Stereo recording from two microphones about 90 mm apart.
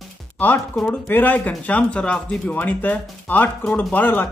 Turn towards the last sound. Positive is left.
turn(degrees=20)  # may be behind; listen again after turning